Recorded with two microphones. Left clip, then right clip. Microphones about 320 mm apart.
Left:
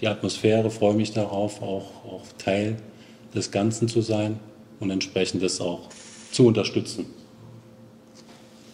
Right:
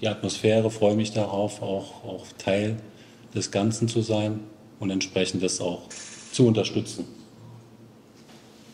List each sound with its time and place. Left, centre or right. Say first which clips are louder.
0.0 s speech: left 1 dB; centre